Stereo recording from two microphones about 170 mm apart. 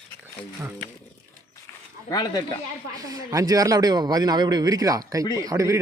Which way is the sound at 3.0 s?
20° right (ahead or behind).